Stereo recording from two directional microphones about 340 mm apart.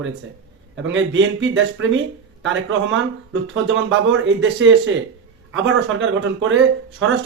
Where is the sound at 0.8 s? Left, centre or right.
Right.